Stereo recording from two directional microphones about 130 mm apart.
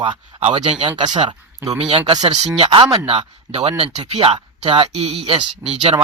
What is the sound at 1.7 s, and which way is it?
Speech, 50° right (ahead or behind).